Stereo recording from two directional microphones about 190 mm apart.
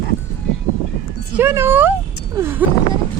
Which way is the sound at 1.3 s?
10° right (ahead or behind).